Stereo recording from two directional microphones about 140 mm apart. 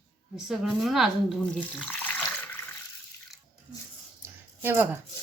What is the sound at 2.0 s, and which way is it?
Water, 10° left (ahead or behind).